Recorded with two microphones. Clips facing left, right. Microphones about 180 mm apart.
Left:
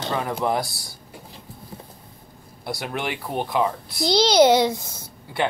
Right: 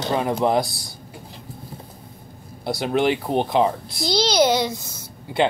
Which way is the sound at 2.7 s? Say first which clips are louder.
Right 8 dB; 25° right (ahead or behind).